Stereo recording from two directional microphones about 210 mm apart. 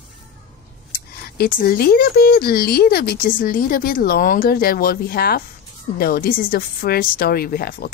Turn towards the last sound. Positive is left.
turn(degrees=45)  # may be behind; listen again after turning